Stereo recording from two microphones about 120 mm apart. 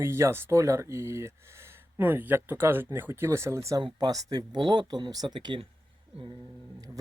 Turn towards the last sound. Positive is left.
turn(degrees=-40)  # may be behind; listen again after turning